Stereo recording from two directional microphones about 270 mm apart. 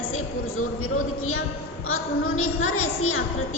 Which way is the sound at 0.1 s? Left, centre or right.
Left.